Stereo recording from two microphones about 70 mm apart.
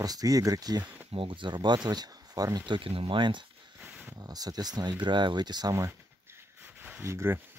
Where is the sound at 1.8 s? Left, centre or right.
Right.